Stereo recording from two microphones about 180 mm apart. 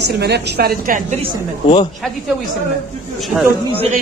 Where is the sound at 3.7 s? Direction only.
35° right (ahead or behind).